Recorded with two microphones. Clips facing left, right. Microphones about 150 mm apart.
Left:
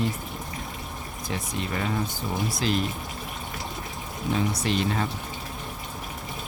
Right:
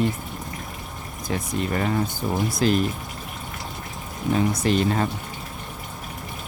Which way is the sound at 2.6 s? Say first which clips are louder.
Right 7 dB; 45° right (ahead or behind).